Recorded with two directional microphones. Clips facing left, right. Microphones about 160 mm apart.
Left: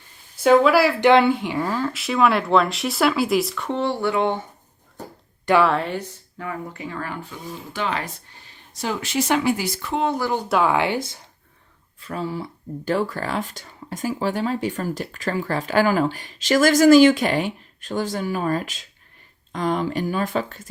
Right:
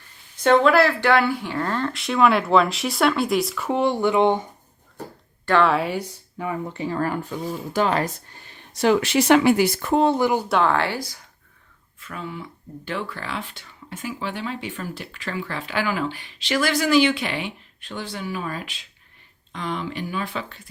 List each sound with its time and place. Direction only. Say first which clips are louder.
0.4 s speech: left 1 dB; 5° left (ahead or behind)
1.1 s speech: left 4 dB; 20° left (ahead or behind); by 3.8 s 5° right (ahead or behind)
3.8 s speech: right 3 dB; 15° right (ahead or behind)
5.6 s speech: right 1 dB; 5° right (ahead or behind)
6.8 s speech: right 10 dB; 40° right (ahead or behind)
8.7 s speech: right 6 dB; 70° right (ahead or behind); by 10.0 s 55° right (ahead or behind)
10.2 s speech: right 3 dB; 15° right (ahead or behind)
10.5 s speech: left 1 dB; 10° left (ahead or behind)
11.9 s speech: left 6 dB; 35° left (ahead or behind)